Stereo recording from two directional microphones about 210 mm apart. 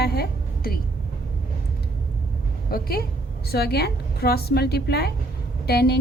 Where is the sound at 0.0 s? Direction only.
50° left (ahead or behind).